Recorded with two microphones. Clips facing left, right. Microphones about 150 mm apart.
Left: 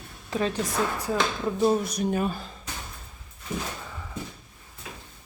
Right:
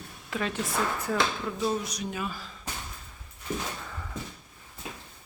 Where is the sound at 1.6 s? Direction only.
50° left (ahead or behind).